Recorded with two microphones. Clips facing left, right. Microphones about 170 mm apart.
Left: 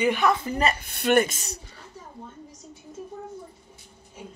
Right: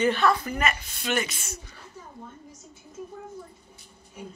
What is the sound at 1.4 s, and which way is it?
Speech, 35° left (ahead or behind).